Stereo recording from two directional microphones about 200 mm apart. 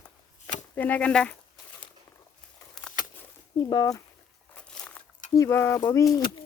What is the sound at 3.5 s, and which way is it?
Speech, 20° left (ahead or behind).